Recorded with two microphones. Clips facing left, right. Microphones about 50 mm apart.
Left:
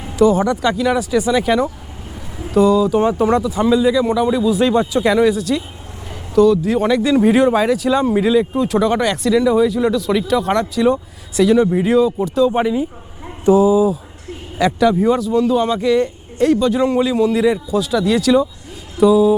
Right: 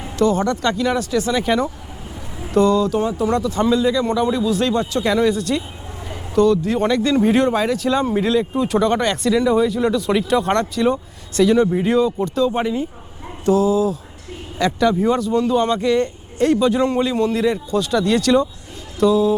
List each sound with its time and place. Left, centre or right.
0.2 s a man's voice: centre
3.0 s speech: left
3.4 s speech: centre
5.0 s a man's voice: centre